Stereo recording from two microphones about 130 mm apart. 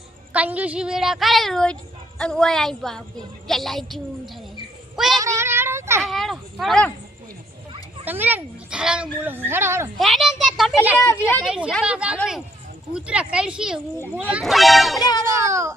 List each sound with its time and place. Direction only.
0.3 s a woman's voice: 10° right (ahead or behind)
4.9 s child singing: centre (ahead or behind)
5.2 s a sound: 20° right (ahead or behind)
6.0 s speech: centre (ahead or behind)
8.0 s speech: 15° right (ahead or behind)
10.0 s speech: centre (ahead or behind)
11.0 s a woman's voice: 20° left (ahead or behind)
11.4 s a woman's voice: 5° right (ahead or behind)
14.9 s speech: 30° left (ahead or behind)
15.2 s a child's voice: 25° right (ahead or behind)